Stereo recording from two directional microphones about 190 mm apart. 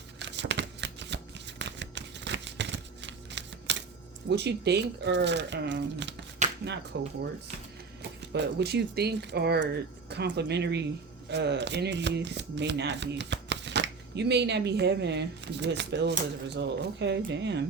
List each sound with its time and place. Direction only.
0.2 s shuffling cards: 70° right (ahead or behind)
4.3 s speech: 60° right (ahead or behind)
6.4 s a sound: 40° right (ahead or behind)
6.9 s speech: 70° right (ahead or behind)
8.3 s speech: 60° right (ahead or behind)